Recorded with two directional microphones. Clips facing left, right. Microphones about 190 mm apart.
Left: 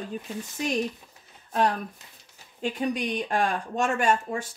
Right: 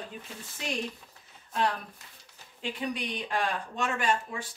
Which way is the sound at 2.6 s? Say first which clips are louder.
Left 6 dB; 45° left (ahead or behind).